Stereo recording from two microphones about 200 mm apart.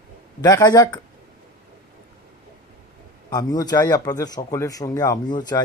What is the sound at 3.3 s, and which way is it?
Speech, 20° left (ahead or behind).